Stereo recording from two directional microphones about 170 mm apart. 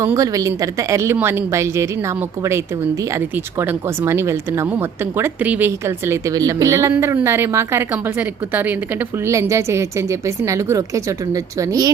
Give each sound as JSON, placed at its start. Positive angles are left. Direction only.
{"t": 0.0, "sound": "speech", "side_deg": -20}